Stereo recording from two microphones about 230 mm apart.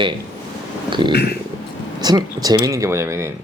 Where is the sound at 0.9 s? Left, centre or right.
Right.